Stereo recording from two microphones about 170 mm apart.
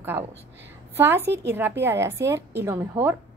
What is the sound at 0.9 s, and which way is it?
A woman's voice, 15° right (ahead or behind).